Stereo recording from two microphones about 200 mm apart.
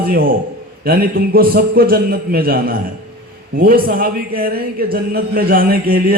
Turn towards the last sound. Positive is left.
turn(degrees=-50)  # may be behind; listen again after turning